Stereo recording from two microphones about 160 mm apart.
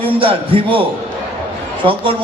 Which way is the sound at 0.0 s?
35° right (ahead or behind).